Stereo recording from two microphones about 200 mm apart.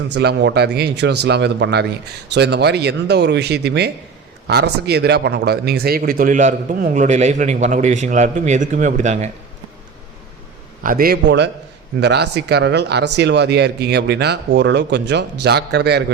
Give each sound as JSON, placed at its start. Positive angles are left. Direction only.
{"t": 0.1, "sound": "speech", "side_deg": -60}
{"t": 10.8, "sound": "a man's voice", "side_deg": -45}